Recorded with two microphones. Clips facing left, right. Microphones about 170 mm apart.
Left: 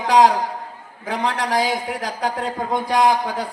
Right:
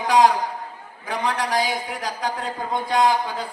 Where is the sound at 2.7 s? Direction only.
90° left.